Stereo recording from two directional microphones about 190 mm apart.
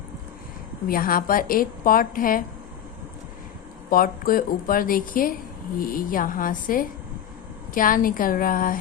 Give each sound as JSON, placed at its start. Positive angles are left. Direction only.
{"t": 0.9, "sound": "a woman's voice", "side_deg": 50}
{"t": 3.8, "sound": "a woman's voice", "side_deg": 50}